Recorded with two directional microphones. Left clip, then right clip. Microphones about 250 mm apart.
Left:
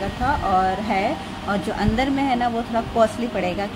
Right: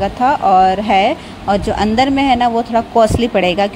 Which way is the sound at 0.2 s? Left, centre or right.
Right.